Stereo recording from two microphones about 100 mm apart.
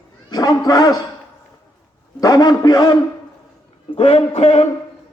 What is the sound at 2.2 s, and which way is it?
Speech, 40° left (ahead or behind).